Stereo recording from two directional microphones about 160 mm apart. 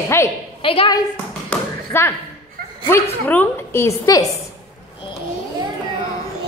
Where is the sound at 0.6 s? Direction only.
35° left (ahead or behind).